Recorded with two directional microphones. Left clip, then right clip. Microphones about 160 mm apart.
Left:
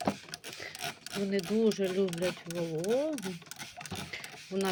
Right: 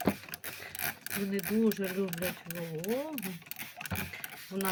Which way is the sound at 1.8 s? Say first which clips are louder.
Left 4 dB; 25° left (ahead or behind).